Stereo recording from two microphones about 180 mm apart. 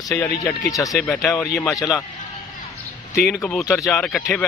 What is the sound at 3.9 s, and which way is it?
Speech, 5° left (ahead or behind).